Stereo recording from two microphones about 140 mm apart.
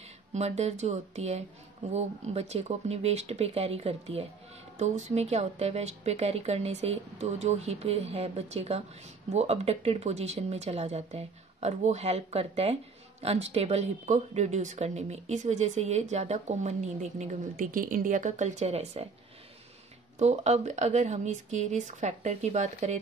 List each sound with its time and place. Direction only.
0.3 s speech: 50° right (ahead or behind)
20.2 s speech: 50° right (ahead or behind)